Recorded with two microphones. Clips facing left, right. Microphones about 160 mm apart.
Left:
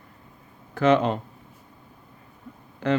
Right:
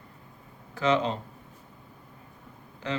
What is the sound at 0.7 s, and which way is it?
Speech, 55° left (ahead or behind).